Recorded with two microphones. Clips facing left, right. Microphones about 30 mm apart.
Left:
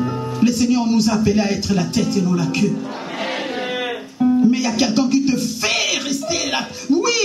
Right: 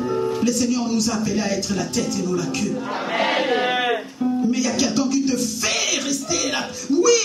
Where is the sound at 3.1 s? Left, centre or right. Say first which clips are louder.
Right 5 dB; right.